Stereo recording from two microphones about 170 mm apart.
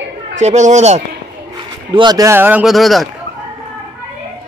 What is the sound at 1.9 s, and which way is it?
Speech, 25° right (ahead or behind).